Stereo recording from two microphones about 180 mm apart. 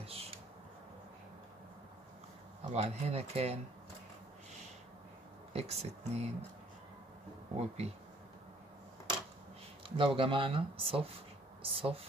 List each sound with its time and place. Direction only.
0.0 s a sound: 35° right (ahead or behind)
2.7 s speech: 35° right (ahead or behind)
5.5 s speech: 35° right (ahead or behind)
7.5 s speech: 35° right (ahead or behind)
9.8 s speech: 30° right (ahead or behind)